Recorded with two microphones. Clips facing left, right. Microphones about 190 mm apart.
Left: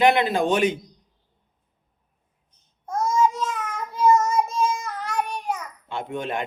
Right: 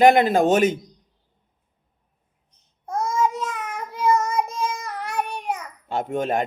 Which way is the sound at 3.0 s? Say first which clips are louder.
Left 1 dB; 60° right (ahead or behind).